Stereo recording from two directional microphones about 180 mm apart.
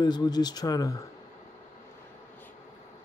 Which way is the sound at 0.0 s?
25° left (ahead or behind).